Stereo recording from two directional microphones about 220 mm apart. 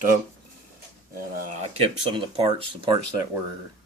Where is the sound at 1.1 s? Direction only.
35° right (ahead or behind).